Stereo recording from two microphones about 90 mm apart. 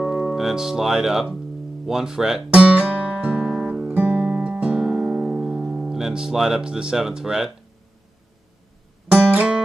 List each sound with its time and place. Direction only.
0.0 s speech: 5° right (ahead or behind)
2.5 s music: 15° right (ahead or behind)
9.1 s music: 15° right (ahead or behind)